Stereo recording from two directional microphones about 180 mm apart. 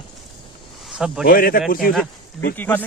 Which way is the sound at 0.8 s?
5° right (ahead or behind).